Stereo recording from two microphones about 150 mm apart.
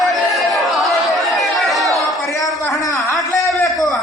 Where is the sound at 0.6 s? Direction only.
Centre (ahead or behind).